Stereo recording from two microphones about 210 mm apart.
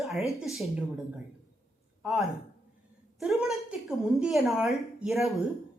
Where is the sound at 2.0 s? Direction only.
Centre (ahead or behind).